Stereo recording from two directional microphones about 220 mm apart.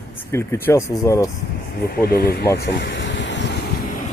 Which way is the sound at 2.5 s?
50° left (ahead or behind).